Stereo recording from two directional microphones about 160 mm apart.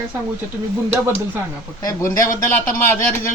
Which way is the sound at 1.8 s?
20° left (ahead or behind).